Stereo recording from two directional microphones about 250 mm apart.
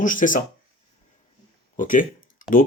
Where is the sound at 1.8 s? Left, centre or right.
Left.